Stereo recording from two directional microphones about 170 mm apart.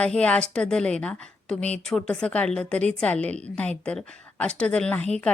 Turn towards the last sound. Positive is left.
turn(degrees=5)  # may be behind; listen again after turning